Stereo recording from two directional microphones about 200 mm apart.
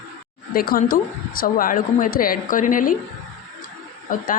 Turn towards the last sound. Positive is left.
turn(degrees=40)  # may be behind; listen again after turning